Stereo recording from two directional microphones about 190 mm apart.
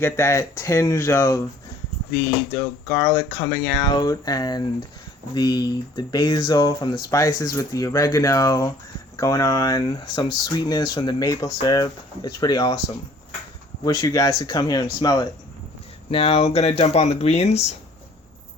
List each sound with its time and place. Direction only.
0.0 s speech: 15° left (ahead or behind)
13.8 s speech: 20° left (ahead or behind)
16.1 s speech: 30° left (ahead or behind)